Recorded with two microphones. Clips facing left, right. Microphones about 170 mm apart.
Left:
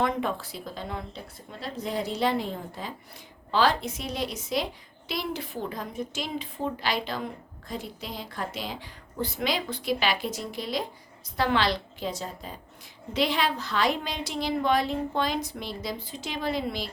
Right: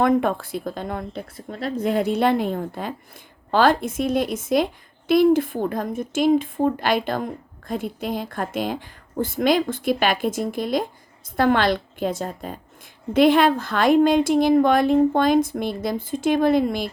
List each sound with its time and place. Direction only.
0.0 s a woman's voice: 55° right (ahead or behind)